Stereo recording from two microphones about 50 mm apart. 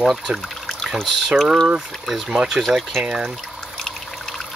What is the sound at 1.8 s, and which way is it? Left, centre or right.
Speech, centre.